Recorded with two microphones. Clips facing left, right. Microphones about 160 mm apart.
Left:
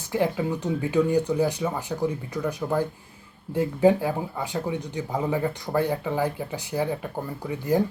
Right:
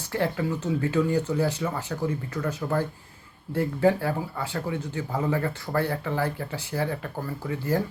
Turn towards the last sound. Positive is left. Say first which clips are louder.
# left 3 dB
turn(degrees=15)  # may be behind; listen again after turning